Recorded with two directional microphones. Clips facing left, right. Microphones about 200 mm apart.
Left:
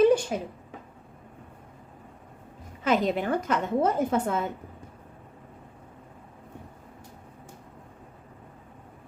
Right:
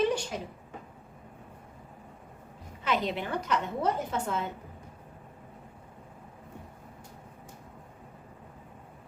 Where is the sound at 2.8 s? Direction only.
45° left (ahead or behind).